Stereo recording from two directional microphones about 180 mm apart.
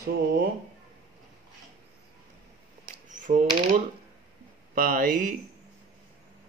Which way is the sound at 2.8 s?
45° right (ahead or behind).